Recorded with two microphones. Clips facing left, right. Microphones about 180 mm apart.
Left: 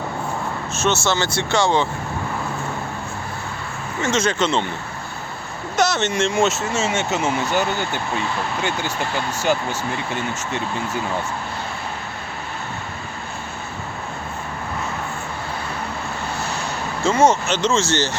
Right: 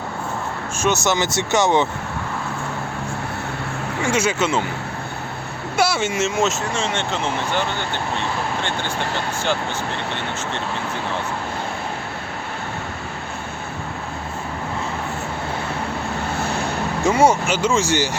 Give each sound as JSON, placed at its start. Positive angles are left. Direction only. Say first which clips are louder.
{"t": 0.8, "sound": "speech", "louder": "right 1 dB", "side_deg": -15}
{"t": 4.0, "sound": "speech", "louder": "even", "side_deg": -10}
{"t": 5.7, "sound": "speech", "louder": "even", "side_deg": -10}
{"t": 17.0, "sound": "speech", "louder": "even", "side_deg": -15}